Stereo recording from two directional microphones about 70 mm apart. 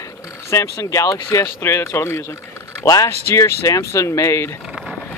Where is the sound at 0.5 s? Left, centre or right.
Left.